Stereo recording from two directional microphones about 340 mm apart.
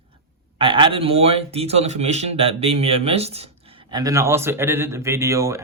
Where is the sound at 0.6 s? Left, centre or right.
Centre.